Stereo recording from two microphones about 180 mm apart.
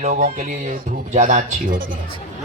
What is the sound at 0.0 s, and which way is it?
Speech, 45° right (ahead or behind).